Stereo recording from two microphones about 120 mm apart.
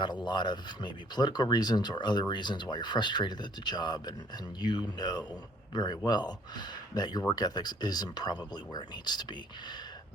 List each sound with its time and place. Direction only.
0.0 s speech: 40° left (ahead or behind)